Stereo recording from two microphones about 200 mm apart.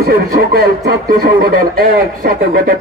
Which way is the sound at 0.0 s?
50° right (ahead or behind).